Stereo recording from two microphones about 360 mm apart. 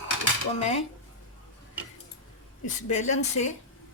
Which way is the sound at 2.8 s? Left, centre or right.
Centre.